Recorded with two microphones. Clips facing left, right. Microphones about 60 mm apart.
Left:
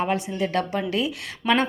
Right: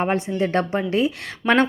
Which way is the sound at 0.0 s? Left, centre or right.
Right.